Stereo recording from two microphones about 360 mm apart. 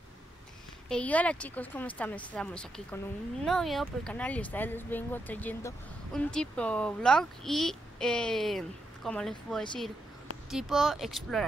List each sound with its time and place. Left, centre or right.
0.8 s speech: centre